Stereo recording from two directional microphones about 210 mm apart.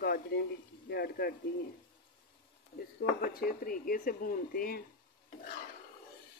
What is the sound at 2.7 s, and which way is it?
Speech, 45° left (ahead or behind).